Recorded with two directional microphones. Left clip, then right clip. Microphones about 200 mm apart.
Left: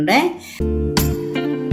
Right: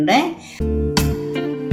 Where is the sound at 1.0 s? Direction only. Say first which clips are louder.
Even; centre (ahead or behind).